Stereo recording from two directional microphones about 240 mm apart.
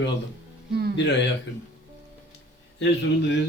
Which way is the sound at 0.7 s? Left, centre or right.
Right.